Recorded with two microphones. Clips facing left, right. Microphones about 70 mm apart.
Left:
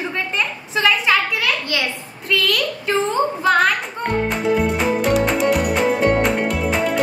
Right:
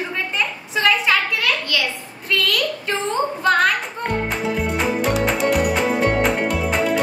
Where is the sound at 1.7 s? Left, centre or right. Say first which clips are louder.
Even; left.